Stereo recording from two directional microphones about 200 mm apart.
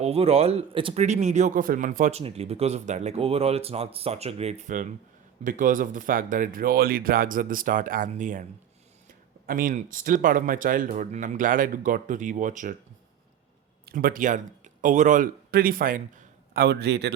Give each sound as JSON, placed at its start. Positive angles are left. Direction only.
{"t": 0.0, "sound": "a man's voice", "side_deg": -30}
{"t": 9.5, "sound": "speech", "side_deg": -45}
{"t": 13.8, "sound": "speech", "side_deg": -45}